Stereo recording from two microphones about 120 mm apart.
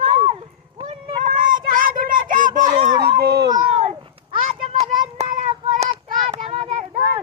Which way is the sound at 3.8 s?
50° right (ahead or behind).